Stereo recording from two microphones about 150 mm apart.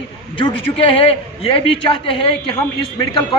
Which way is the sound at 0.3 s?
40° left (ahead or behind).